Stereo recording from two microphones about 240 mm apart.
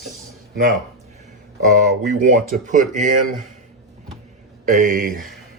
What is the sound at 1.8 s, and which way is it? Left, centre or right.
Speech, right.